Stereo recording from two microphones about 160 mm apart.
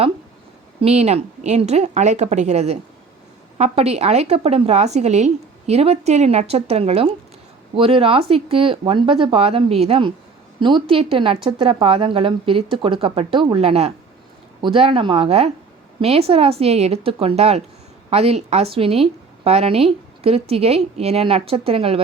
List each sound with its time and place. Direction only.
0.8 s a woman's voice: 40° right (ahead or behind)